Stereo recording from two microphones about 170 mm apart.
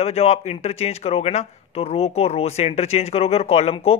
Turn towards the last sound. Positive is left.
turn(degrees=35)  # may be behind; listen again after turning